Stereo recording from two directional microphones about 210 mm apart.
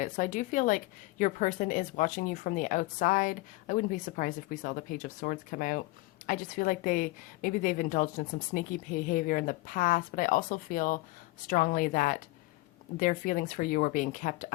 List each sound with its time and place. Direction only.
0.0 s a woman's voice: 35° left (ahead or behind)